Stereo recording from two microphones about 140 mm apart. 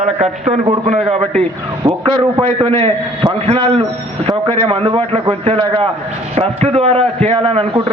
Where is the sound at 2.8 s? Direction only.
40° right (ahead or behind).